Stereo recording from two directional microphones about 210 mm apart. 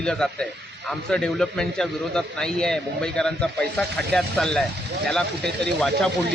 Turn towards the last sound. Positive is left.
turn(degrees=5)  # may be behind; listen again after turning